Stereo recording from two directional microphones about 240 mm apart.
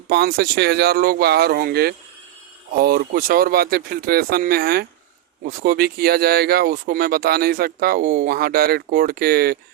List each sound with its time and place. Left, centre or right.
0.1 s speech: right